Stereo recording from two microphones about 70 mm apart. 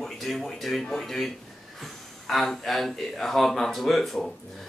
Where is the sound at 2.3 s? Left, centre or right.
Centre.